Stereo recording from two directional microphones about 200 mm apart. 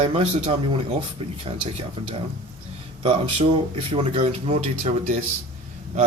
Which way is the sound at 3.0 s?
25° right (ahead or behind).